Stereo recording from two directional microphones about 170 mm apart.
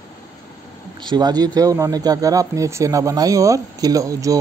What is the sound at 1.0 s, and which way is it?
Speech, 25° right (ahead or behind).